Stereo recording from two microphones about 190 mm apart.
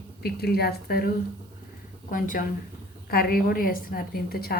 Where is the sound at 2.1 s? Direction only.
45° left (ahead or behind).